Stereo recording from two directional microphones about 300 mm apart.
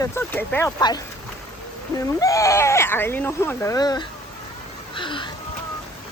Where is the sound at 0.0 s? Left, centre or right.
Centre.